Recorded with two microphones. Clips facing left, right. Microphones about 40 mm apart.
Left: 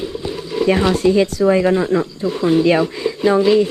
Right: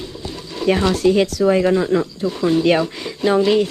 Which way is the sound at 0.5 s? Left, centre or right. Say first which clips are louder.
Left 2 dB; centre.